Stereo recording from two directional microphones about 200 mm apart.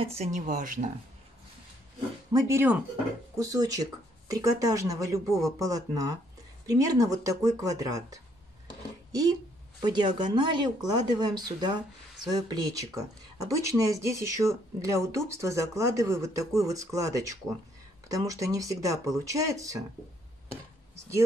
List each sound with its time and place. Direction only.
0.0 s speech: 30° right (ahead or behind)
2.3 s speech: 15° right (ahead or behind)
9.8 s speech: 20° right (ahead or behind)